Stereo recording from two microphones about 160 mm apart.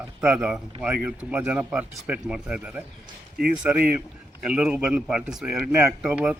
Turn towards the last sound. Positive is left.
turn(degrees=-5)  # may be behind; listen again after turning